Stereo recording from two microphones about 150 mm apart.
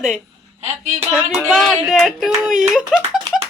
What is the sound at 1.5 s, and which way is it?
Speech, centre (ahead or behind).